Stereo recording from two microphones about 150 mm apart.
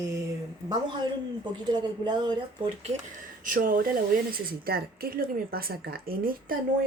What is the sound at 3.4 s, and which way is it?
Speech, 70° right (ahead or behind).